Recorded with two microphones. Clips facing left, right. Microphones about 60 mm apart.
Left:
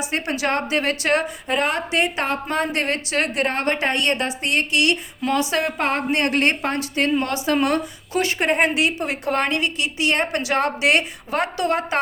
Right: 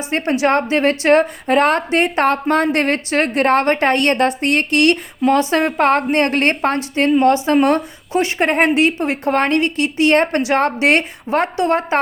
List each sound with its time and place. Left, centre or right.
0.1 s a woman's voice: right